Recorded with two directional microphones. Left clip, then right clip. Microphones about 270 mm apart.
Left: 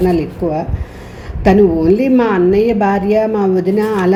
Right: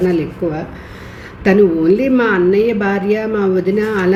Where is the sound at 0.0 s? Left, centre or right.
Centre.